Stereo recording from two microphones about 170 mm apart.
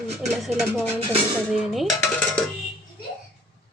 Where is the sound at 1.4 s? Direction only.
Centre (ahead or behind).